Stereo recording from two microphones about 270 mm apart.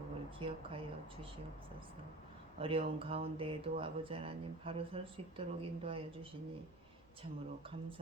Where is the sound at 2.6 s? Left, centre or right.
Right.